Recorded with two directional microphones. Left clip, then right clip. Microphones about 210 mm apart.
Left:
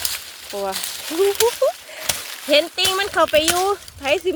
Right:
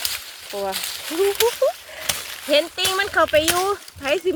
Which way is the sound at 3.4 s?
15° right (ahead or behind).